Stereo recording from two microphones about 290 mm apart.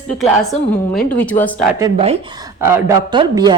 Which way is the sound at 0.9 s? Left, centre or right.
Centre.